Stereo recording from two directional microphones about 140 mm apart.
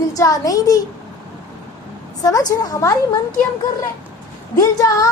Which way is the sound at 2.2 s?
25° left (ahead or behind).